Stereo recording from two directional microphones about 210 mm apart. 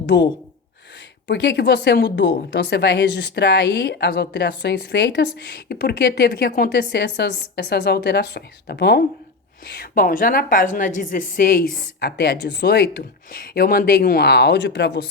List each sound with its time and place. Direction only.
0.0 s speech: 55° left (ahead or behind)
1.3 s a woman's voice: 55° left (ahead or behind)